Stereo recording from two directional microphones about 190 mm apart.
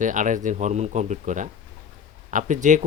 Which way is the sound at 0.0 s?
40° right (ahead or behind).